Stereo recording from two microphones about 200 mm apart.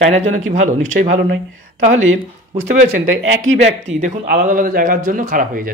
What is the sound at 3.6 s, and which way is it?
A man's voice, 35° right (ahead or behind).